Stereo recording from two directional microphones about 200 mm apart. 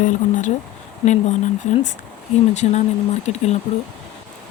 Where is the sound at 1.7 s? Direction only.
35° left (ahead or behind).